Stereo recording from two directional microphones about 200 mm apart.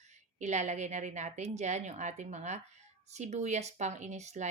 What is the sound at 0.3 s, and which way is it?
Speech, 35° right (ahead or behind).